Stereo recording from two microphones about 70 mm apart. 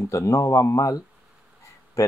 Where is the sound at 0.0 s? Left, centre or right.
Left.